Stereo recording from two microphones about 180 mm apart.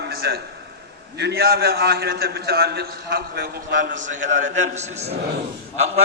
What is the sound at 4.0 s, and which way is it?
A man's voice, 45° right (ahead or behind).